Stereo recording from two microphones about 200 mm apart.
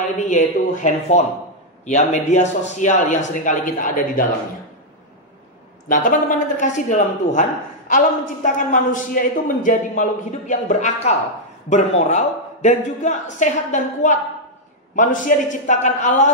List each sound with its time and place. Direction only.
0.2 s a man's voice: 35° left (ahead or behind)
5.9 s a man's voice: 40° left (ahead or behind)